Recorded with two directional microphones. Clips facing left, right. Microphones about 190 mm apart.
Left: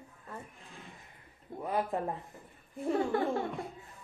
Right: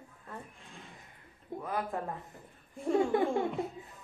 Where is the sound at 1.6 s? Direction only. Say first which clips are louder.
Left 3 dB; 20° left (ahead or behind).